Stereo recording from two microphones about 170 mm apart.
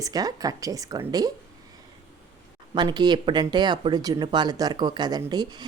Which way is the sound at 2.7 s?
25° right (ahead or behind).